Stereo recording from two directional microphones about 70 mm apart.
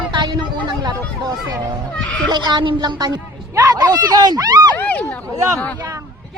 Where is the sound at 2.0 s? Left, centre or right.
Centre.